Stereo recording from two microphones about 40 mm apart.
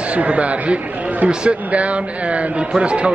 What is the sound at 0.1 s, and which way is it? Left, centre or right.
A man's voice, right.